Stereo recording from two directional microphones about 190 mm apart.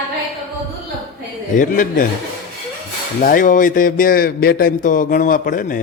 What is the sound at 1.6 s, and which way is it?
Speech, 45° left (ahead or behind).